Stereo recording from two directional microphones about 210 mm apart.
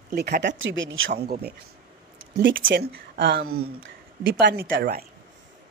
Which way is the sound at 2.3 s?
60° right (ahead or behind).